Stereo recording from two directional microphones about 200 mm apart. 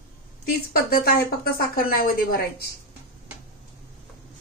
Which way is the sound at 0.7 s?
50° left (ahead or behind).